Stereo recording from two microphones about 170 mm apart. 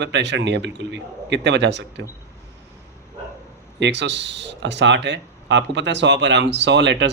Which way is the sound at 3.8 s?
90° right.